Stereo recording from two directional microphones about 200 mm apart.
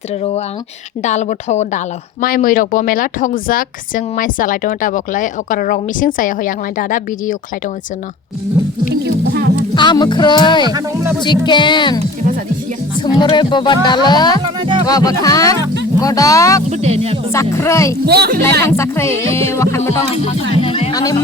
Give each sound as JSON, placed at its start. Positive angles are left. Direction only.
{"t": 0.1, "sound": "a woman's voice", "side_deg": 30}
{"t": 8.9, "sound": "speech", "side_deg": -55}
{"t": 9.7, "sound": "speech", "side_deg": 20}
{"t": 10.7, "sound": "speech", "side_deg": -20}
{"t": 11.2, "sound": "speech", "side_deg": 20}
{"t": 14.4, "sound": "speech", "side_deg": -25}
{"t": 14.8, "sound": "speech", "side_deg": 20}
{"t": 16.6, "sound": "speech", "side_deg": -35}
{"t": 17.3, "sound": "speech", "side_deg": 15}
{"t": 18.0, "sound": "speech", "side_deg": -55}
{"t": 18.6, "sound": "speech", "side_deg": 15}
{"t": 20.6, "sound": "speech", "side_deg": 25}